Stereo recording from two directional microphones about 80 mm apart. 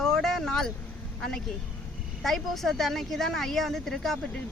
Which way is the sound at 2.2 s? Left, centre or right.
Centre.